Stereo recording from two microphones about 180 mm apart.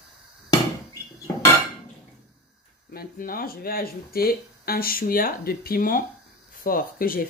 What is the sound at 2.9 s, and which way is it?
Speech, 55° left (ahead or behind).